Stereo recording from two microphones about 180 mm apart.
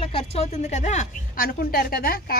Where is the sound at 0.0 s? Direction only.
35° left (ahead or behind).